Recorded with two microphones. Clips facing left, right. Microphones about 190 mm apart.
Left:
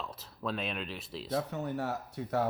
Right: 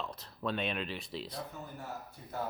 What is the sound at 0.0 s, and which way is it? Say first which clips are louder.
Speech: even; centre (ahead or behind).